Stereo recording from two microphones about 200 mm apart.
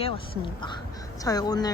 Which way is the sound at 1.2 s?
20° left (ahead or behind).